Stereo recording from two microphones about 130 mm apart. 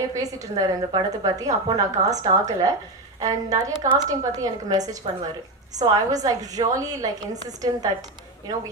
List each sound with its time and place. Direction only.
0.1 s a woman's voice: 25° right (ahead or behind)